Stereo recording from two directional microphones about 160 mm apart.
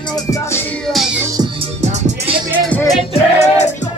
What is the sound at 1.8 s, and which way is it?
Music, 45° right (ahead or behind).